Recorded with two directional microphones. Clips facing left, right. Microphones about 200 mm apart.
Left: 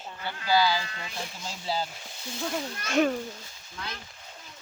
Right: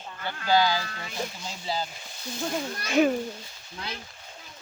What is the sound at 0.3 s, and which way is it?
Speech, 50° right (ahead or behind).